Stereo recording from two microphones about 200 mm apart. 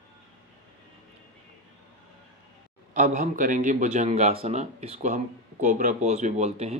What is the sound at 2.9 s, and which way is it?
A man's voice, 35° right (ahead or behind).